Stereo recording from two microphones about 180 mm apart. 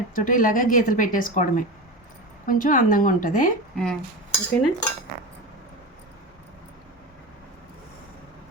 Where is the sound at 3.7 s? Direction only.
Centre (ahead or behind).